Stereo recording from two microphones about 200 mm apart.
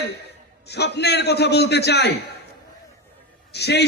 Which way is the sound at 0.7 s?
55° left (ahead or behind).